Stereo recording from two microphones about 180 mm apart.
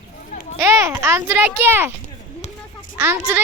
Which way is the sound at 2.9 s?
10° right (ahead or behind).